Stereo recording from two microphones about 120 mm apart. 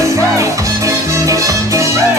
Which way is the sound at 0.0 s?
25° right (ahead or behind).